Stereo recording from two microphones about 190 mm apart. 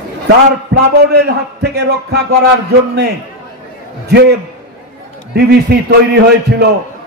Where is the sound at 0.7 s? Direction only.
65° right (ahead or behind).